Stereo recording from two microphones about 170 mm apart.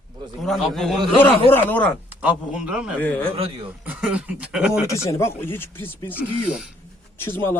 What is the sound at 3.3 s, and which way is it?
Speech, 35° right (ahead or behind).